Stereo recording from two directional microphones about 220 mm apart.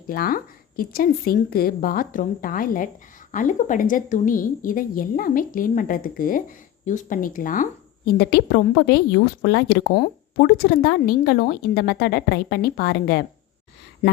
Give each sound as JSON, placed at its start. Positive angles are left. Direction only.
{"t": 0.1, "sound": "a woman's voice", "side_deg": 40}